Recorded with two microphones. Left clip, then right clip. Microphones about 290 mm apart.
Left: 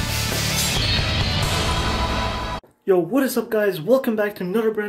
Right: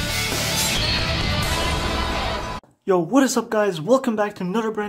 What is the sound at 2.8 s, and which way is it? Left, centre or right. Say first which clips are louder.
Speech: right 1 dB; centre.